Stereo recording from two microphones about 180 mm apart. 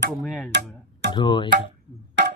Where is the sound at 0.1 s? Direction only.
Centre (ahead or behind).